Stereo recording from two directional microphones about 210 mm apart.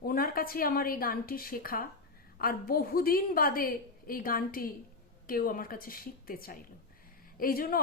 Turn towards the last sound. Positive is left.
turn(degrees=45)  # may be behind; listen again after turning